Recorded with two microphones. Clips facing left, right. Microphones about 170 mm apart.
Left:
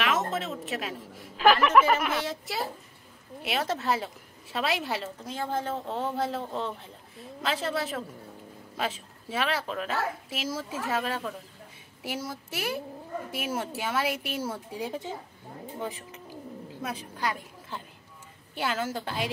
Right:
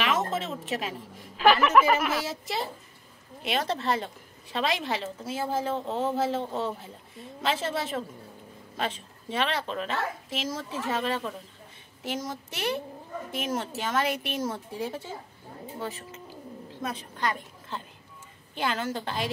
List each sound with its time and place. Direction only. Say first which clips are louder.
0.0 s a woman's voice: right 1 dB; centre (ahead or behind)